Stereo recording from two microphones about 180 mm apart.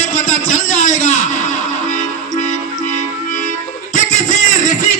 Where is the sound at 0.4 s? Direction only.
45° left (ahead or behind).